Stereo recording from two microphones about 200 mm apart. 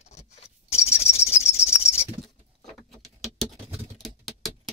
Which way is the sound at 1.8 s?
30° left (ahead or behind).